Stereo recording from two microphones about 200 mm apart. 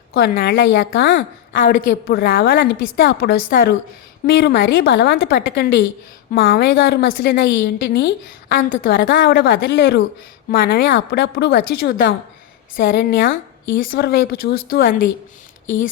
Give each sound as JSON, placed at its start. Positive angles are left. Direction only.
{"t": 0.1, "sound": "a woman's voice", "side_deg": 50}
{"t": 10.5, "sound": "a woman's voice", "side_deg": 50}